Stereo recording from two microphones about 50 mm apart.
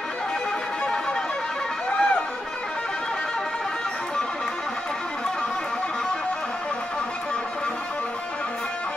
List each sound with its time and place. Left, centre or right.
1.9 s run: left